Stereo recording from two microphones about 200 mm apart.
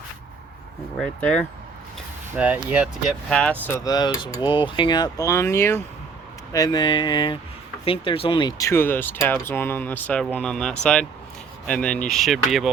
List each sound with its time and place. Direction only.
0.9 s speech: 5° left (ahead or behind)
2.3 s speech: 10° right (ahead or behind)
3.1 s speech: 5° left (ahead or behind)